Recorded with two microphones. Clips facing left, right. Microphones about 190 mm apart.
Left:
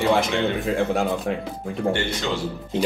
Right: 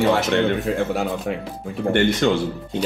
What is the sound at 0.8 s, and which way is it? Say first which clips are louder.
Speech: left 1 dB; centre (ahead or behind).